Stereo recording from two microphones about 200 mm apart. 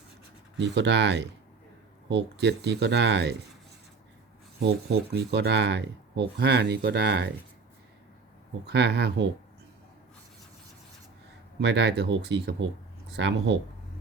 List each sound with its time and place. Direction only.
0.5 s speech: 60° right (ahead or behind)
4.6 s speech: 55° right (ahead or behind)
8.6 s speech: 55° right (ahead or behind)
11.6 s speech: 60° right (ahead or behind)